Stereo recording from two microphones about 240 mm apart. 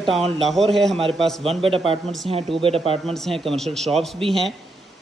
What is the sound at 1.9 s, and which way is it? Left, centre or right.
Speech, right.